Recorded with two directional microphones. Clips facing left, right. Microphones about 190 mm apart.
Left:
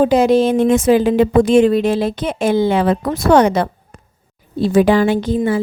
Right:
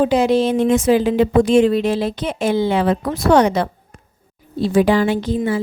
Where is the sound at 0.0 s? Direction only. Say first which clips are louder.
Left 3 dB; 45° left (ahead or behind).